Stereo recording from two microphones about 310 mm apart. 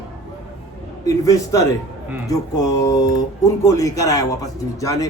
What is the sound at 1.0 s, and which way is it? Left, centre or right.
A man's voice, centre.